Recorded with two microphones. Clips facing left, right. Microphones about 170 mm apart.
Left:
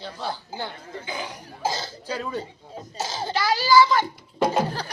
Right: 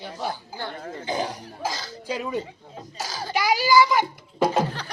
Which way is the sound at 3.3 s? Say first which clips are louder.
Even; 15° right (ahead or behind).